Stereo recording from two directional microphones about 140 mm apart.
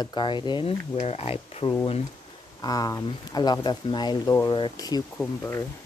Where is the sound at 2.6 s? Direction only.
25° left (ahead or behind).